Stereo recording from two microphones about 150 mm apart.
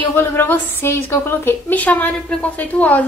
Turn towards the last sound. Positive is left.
turn(degrees=10)  # may be behind; listen again after turning